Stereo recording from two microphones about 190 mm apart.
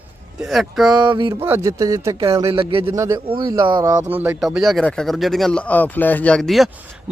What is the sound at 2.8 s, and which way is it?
Speech, 15° right (ahead or behind).